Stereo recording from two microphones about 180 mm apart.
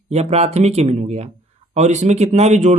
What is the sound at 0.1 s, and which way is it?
Speech, 35° right (ahead or behind).